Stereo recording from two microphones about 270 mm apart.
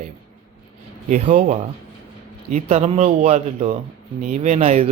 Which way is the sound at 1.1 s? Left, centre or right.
Right.